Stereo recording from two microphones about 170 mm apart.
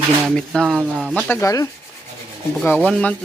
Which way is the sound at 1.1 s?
15° left (ahead or behind).